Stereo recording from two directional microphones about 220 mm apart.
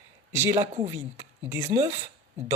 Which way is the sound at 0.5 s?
25° right (ahead or behind).